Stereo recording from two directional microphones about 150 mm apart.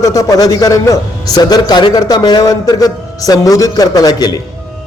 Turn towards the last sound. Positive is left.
turn(degrees=25)  # may be behind; listen again after turning